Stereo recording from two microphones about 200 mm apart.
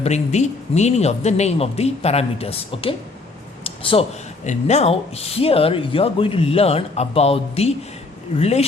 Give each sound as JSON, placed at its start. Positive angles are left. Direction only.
{"t": 0.0, "sound": "speech", "side_deg": 35}
{"t": 3.6, "sound": "a sound", "side_deg": 30}
{"t": 4.4, "sound": "speech", "side_deg": 35}